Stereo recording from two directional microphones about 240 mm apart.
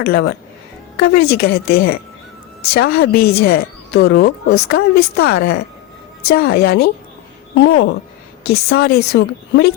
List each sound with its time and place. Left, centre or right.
0.0 s a woman's voice: left